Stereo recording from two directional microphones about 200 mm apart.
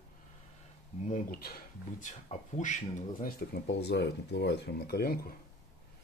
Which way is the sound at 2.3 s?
35° left (ahead or behind).